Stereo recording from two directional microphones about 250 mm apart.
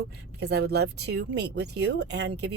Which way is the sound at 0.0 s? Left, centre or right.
Right.